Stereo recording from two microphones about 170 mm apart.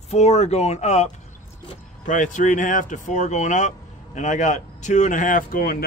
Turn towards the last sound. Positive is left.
turn(degrees=60)  # may be behind; listen again after turning